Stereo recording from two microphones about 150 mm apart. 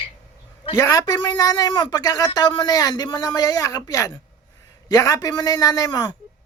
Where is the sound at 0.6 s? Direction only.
30° left (ahead or behind).